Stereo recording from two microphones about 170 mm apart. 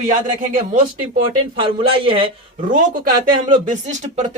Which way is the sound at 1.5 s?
30° right (ahead or behind).